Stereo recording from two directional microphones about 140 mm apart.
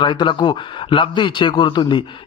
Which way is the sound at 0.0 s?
35° left (ahead or behind).